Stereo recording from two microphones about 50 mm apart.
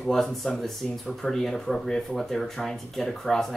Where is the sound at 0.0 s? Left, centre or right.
Centre.